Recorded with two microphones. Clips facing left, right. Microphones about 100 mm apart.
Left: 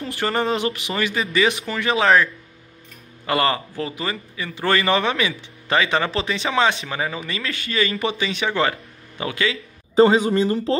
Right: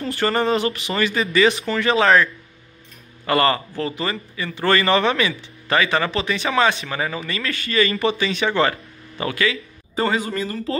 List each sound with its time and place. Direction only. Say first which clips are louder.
0.1 s a man's voice: right 2 dB; 10° left (ahead or behind)
3.3 s a man's voice: right 2 dB; 15° left (ahead or behind)